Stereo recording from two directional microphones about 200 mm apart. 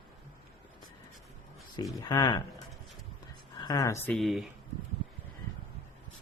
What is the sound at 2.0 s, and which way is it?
Speech, 20° left (ahead or behind).